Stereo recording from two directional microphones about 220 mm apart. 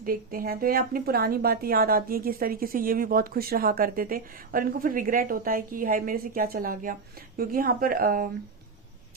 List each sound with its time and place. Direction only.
0.0 s a woman's voice: 40° right (ahead or behind)